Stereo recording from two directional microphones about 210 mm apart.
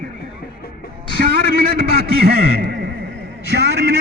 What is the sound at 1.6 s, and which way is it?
A man's voice, 45° right (ahead or behind).